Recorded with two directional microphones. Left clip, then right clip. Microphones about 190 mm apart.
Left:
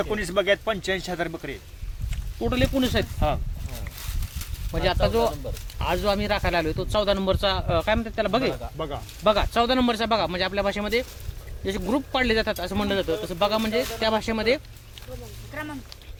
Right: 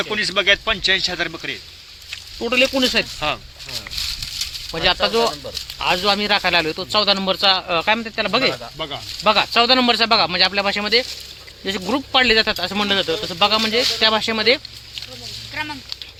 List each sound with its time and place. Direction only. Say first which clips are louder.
0.0 s speech: right 6 dB; 25° left (ahead or behind)
2.4 s speech: right 8 dB; 15° right (ahead or behind)
4.7 s speech: right 5 dB; 20° right (ahead or behind)
8.8 s speech: right 2 dB; 30° left (ahead or behind)
9.2 s speech: right 6 dB; 15° right (ahead or behind)